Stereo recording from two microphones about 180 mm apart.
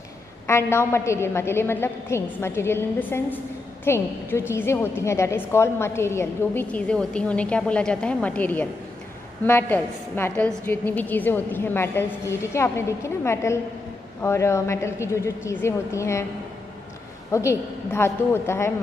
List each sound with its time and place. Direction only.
0.5 s a woman's voice: 15° left (ahead or behind)
17.3 s a woman's voice: 15° left (ahead or behind)